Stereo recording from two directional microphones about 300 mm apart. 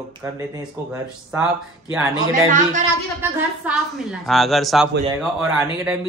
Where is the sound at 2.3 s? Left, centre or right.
Right.